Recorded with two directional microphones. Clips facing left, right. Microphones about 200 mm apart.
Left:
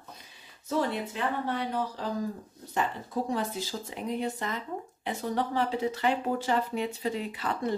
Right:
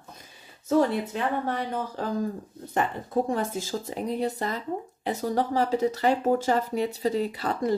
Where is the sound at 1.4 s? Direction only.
50° right (ahead or behind).